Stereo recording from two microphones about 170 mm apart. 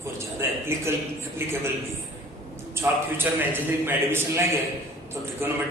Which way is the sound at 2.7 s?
15° right (ahead or behind).